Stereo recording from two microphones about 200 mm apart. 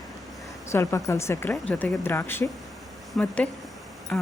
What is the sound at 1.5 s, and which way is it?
A woman's voice, centre (ahead or behind).